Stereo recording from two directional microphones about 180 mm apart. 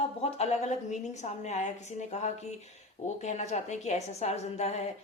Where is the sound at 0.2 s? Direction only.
35° left (ahead or behind).